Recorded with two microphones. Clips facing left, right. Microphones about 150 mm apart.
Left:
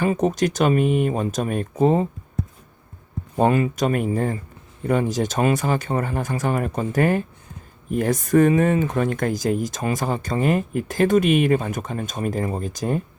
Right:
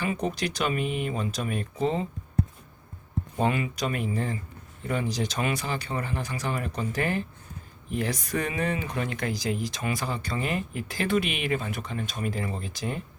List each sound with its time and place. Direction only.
0.0 s speech: 45° left (ahead or behind)
3.3 s speech: 45° left (ahead or behind)